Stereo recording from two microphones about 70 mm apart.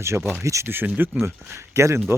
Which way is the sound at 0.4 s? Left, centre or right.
Right.